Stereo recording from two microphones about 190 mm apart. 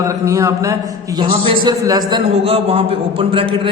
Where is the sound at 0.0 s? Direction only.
15° right (ahead or behind).